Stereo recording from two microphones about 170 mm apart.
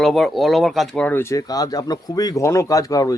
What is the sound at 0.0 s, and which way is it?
Speech, centre (ahead or behind).